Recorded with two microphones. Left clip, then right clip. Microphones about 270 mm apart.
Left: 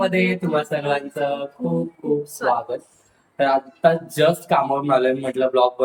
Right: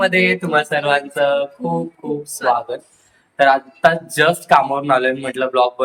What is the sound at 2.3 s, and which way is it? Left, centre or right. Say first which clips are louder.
Speech: right 4 dB; centre.